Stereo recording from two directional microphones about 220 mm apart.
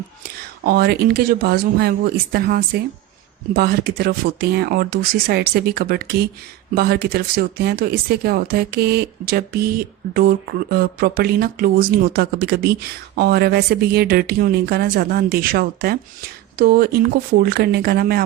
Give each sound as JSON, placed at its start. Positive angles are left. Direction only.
{"t": 0.6, "sound": "speech", "side_deg": -45}